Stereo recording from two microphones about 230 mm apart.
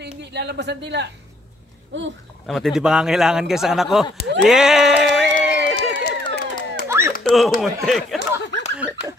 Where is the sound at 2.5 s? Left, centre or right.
Centre.